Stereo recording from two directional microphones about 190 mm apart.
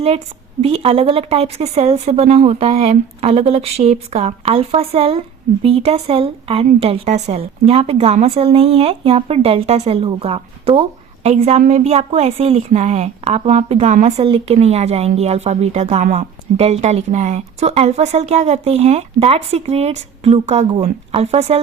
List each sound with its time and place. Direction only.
0.6 s a woman's voice: 30° right (ahead or behind)